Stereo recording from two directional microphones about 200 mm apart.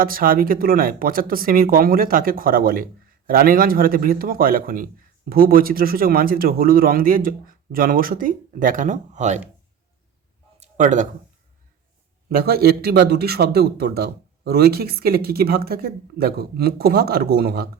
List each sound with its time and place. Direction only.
0.0 s a man's voice: 45° right (ahead or behind)
10.6 s a sound: 40° right (ahead or behind)
12.3 s a man's voice: 50° right (ahead or behind)